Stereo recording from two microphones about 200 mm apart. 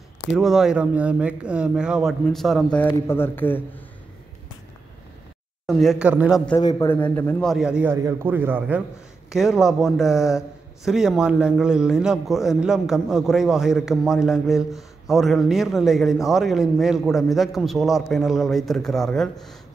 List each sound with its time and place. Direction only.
0.3 s a man's voice: centre (ahead or behind)
5.7 s a man's voice: centre (ahead or behind)
6.6 s a man's voice: 20° left (ahead or behind)
7.0 s a man's voice: 10° left (ahead or behind)